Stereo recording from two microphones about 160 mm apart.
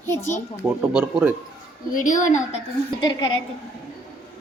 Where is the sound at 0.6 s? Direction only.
10° right (ahead or behind).